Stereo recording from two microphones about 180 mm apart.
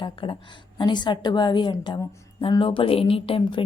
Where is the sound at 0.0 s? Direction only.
25° left (ahead or behind).